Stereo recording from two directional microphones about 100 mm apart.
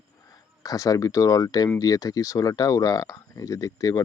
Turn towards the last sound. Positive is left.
turn(degrees=35)  # may be behind; listen again after turning